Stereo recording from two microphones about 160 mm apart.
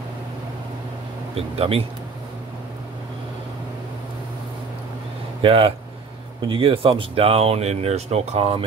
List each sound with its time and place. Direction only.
1.3 s speech: 35° right (ahead or behind)
5.4 s speech: 35° right (ahead or behind)